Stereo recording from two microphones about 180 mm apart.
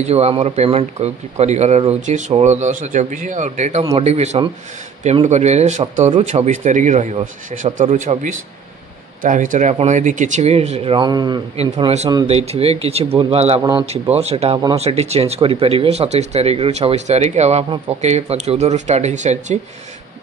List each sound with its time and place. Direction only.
0.0 s speech: 35° right (ahead or behind)
11.5 s speech: 35° right (ahead or behind)
13.6 s a man's voice: 25° right (ahead or behind)
14.1 s speech: 35° right (ahead or behind)